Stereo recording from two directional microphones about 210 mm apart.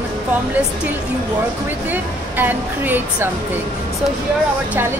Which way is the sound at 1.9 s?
10° right (ahead or behind).